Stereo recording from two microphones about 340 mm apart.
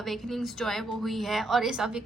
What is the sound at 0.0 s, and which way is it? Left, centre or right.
A woman's voice, centre.